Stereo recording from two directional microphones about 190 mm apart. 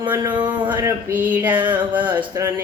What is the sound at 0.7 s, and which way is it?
Mantra, 10° right (ahead or behind).